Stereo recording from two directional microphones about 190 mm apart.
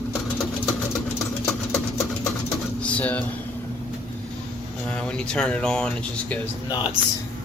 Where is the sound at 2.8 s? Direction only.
5° left (ahead or behind).